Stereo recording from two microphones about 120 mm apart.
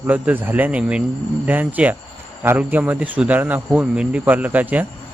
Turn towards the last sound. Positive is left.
turn(degrees=-15)  # may be behind; listen again after turning